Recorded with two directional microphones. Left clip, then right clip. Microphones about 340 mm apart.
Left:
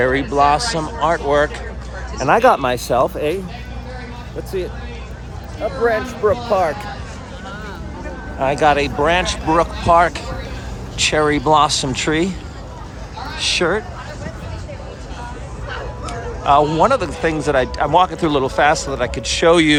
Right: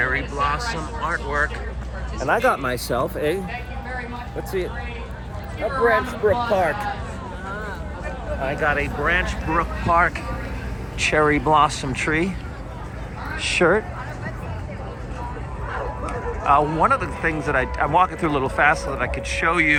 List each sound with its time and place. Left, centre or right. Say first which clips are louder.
0.0 s speech: left 7 dB; centre
2.1 s speech: left 7 dB; left
2.6 s speech: left 7 dB; centre
5.8 s speech: left 2 dB; centre
8.4 s a man's voice: left 8 dB; centre
13.4 s a man's voice: left 1 dB; centre
16.5 s a man's voice: left 4 dB; centre